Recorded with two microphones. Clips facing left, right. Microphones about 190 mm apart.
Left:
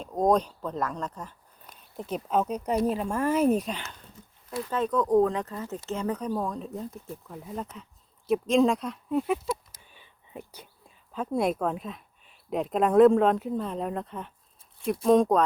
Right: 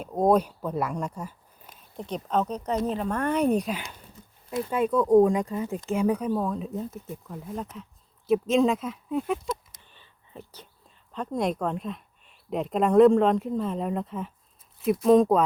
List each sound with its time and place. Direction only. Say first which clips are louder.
0.0 s speech: right 2 dB; 5° right (ahead or behind)
1.7 s speech: even; 5° left (ahead or behind)
4.4 s speech: right 4 dB; 25° right (ahead or behind)
4.7 s speech: right 4 dB; 10° right (ahead or behind)